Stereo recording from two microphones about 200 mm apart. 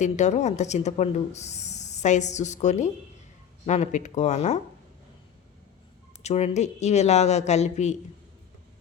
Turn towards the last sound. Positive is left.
turn(degrees=35)  # may be behind; listen again after turning